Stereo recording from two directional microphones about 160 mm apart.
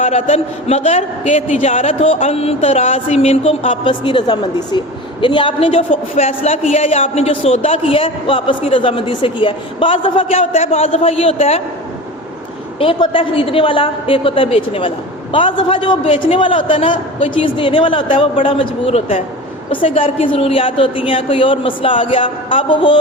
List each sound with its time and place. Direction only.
0.0 s a woman's voice: 40° left (ahead or behind)
12.8 s a woman's voice: 35° left (ahead or behind)